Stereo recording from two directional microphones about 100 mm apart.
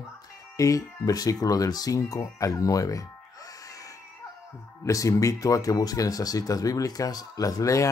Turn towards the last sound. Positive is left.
turn(degrees=35)  # may be behind; listen again after turning